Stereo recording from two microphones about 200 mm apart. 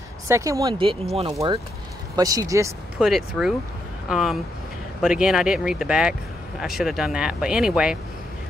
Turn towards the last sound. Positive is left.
turn(degrees=-5)  # may be behind; listen again after turning